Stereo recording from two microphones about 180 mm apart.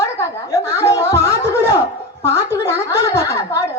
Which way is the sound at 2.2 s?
15° left (ahead or behind).